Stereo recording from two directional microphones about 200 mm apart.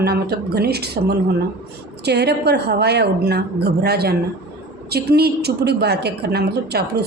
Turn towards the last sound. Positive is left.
turn(degrees=-55)  # may be behind; listen again after turning